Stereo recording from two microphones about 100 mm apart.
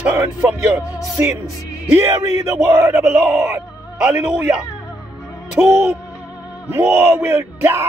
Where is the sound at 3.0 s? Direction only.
10° right (ahead or behind).